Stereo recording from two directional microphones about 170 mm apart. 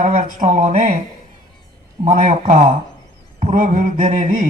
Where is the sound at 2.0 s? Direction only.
50° right (ahead or behind).